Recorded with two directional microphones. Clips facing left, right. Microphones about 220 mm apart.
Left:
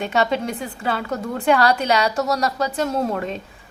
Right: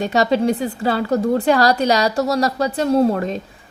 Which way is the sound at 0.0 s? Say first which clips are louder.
Right 5 dB; 35° right (ahead or behind).